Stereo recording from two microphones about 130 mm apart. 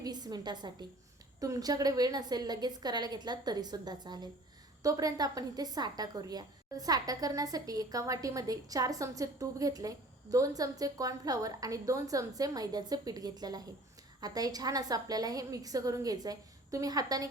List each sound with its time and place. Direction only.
0.0 s a woman's voice: 30° right (ahead or behind)